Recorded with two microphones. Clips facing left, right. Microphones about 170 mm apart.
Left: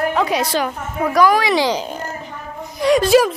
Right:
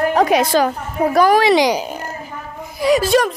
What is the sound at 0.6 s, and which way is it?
Speech, 35° right (ahead or behind).